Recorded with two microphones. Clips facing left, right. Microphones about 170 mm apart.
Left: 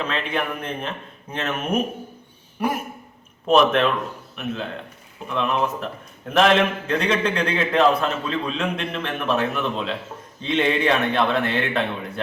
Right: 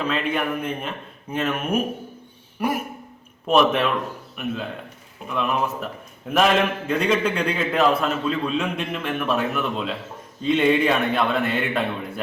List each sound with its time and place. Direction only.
0.1 s a man's voice: 5° right (ahead or behind)
5.3 s a man's voice: 5° right (ahead or behind)